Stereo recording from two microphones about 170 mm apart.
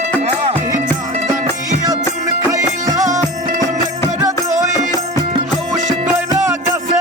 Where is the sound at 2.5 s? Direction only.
20° right (ahead or behind).